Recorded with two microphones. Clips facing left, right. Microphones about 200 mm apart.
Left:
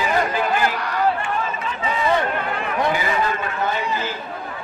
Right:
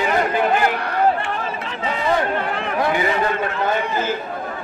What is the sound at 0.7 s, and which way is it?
Run, 55° right (ahead or behind).